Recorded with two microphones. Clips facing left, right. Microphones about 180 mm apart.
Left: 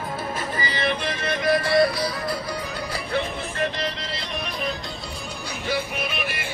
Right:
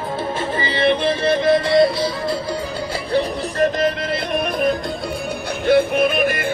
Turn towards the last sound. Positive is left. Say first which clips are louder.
# right 12 dB
turn(degrees=-50)  # may be behind; listen again after turning